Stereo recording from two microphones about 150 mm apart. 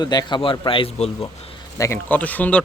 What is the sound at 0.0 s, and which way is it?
Speech, 30° left (ahead or behind).